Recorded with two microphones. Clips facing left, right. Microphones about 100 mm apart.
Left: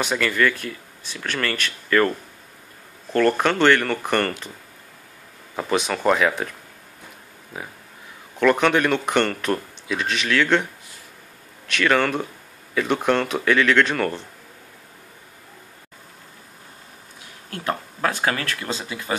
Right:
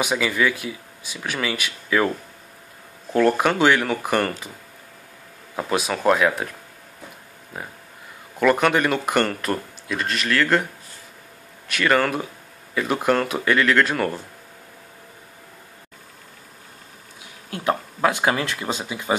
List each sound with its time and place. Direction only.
0.0 s speech: 10° right (ahead or behind)
5.6 s speech: 5° right (ahead or behind)
7.5 s speech: centre (ahead or behind)
17.5 s speech: 15° right (ahead or behind)